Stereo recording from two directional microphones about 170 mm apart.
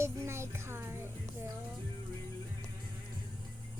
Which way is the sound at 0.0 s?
15° right (ahead or behind).